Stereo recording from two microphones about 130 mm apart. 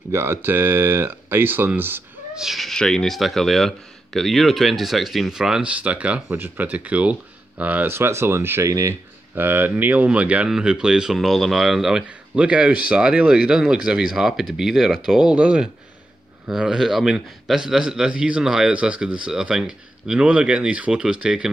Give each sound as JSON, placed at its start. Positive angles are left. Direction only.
{"t": 0.1, "sound": "speech", "side_deg": -20}
{"t": 2.3, "sound": "speech", "side_deg": 0}